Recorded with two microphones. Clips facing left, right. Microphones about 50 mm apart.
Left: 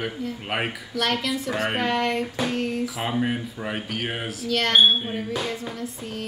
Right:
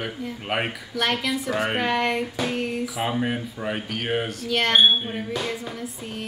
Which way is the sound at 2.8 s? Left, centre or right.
Centre.